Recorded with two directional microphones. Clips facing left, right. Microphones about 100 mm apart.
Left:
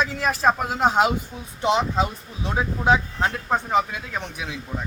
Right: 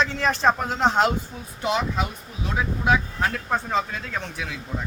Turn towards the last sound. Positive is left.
turn(degrees=20)  # may be behind; listen again after turning